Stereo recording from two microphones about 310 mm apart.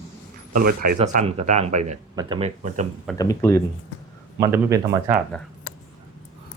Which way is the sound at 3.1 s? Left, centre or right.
Centre.